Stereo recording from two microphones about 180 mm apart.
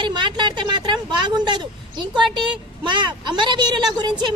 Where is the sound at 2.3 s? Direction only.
25° right (ahead or behind).